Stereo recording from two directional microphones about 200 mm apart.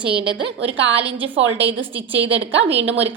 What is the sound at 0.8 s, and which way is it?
A woman's voice, 65° right (ahead or behind).